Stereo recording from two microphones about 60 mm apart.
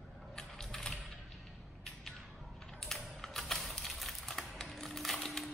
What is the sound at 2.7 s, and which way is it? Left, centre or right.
Typing, centre.